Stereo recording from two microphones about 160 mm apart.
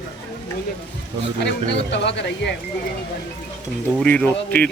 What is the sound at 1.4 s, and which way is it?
Speech, 90° left.